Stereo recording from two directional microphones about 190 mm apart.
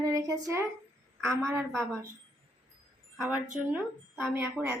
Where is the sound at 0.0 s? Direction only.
20° right (ahead or behind).